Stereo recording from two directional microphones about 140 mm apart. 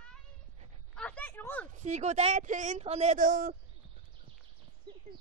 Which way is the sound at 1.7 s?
55° right (ahead or behind).